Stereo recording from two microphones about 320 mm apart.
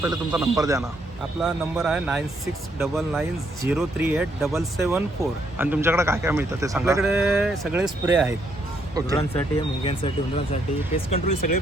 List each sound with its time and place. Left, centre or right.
0.0 s speech: centre
9.1 s speech: centre